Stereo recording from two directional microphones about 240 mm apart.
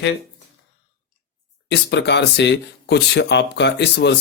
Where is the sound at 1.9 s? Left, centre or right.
Left.